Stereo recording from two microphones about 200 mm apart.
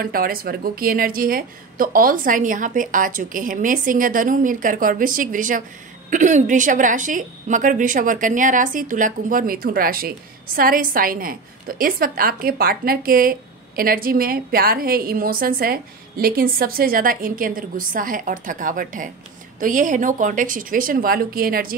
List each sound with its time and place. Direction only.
0.0 s a woman's voice: 45° right (ahead or behind)